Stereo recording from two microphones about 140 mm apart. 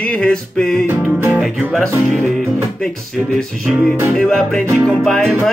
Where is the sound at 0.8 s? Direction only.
15° right (ahead or behind).